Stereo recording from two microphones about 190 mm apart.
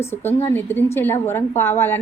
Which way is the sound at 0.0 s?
10° left (ahead or behind).